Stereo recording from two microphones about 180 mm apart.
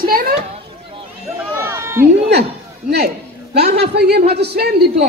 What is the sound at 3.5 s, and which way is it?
A man's voice, 65° right (ahead or behind).